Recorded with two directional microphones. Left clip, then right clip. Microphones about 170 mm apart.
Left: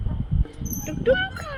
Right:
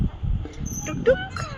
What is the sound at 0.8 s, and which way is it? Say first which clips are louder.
Speech: right 1 dB; centre (ahead or behind).